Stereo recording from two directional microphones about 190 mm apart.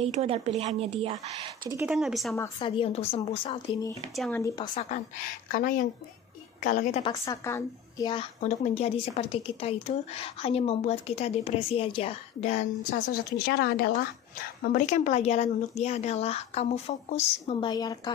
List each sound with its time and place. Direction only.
0.0 s speech: 35° right (ahead or behind)
1.9 s speech: 5° right (ahead or behind)
2.6 s a woman's voice: 30° left (ahead or behind)
3.2 s speech: 15° left (ahead or behind)
4.1 s speech: centre (ahead or behind)
4.4 s a woman's voice: 25° left (ahead or behind)
4.9 s a woman's voice: 45° left (ahead or behind)
7.0 s a woman's voice: 20° left (ahead or behind)
8.1 s a woman's voice: 35° left (ahead or behind)
13.1 s a woman's voice: 55° left (ahead or behind); by 18.1 s 20° left (ahead or behind)